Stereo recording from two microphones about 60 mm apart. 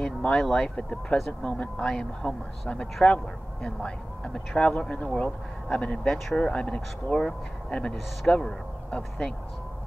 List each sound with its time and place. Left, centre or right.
0.0 s speech: centre
6.0 s speech: centre
6.3 s speech: centre